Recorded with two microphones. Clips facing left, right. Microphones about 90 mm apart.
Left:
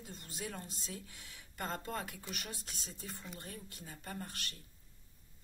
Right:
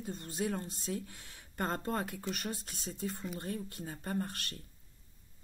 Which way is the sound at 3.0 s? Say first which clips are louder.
Right 10 dB; centre (ahead or behind).